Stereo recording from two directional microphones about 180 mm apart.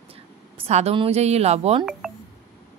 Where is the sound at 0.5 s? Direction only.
35° right (ahead or behind).